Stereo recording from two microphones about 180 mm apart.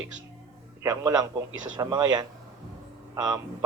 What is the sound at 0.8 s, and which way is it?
A man's voice, 15° right (ahead or behind).